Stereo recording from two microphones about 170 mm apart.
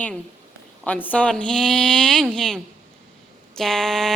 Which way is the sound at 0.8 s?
10° left (ahead or behind).